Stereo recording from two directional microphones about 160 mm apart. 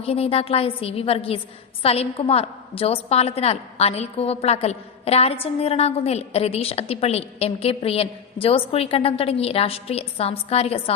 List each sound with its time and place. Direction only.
0.0 s a woman's voice: 40° left (ahead or behind)